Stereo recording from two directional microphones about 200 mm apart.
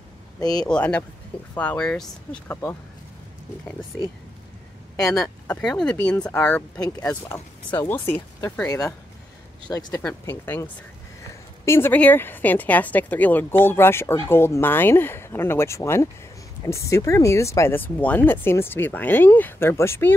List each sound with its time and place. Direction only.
0.7 s a woman's voice: 5° left (ahead or behind)
5.0 s a woman's voice: 15° left (ahead or behind)
5.6 s a woman's voice: 5° left (ahead or behind)